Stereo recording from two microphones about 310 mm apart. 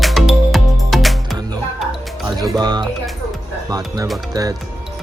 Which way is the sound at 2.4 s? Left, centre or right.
Centre.